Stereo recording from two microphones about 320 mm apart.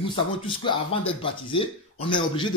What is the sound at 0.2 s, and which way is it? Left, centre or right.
A man's voice, centre.